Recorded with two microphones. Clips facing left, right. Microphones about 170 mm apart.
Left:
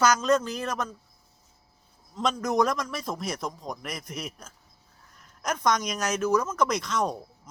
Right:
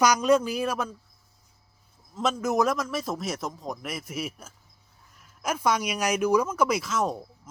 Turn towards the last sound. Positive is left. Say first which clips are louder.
# right 1 dB
turn(degrees=-5)  # may be behind; listen again after turning